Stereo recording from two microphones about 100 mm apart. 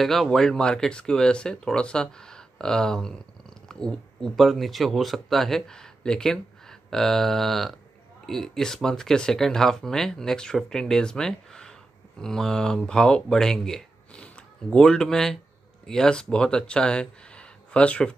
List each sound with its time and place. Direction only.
0.0 s speech: centre (ahead or behind)